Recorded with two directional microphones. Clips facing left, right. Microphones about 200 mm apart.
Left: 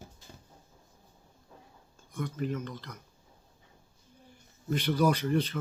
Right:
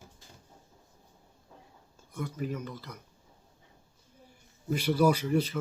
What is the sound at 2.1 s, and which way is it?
Speech, 5° right (ahead or behind).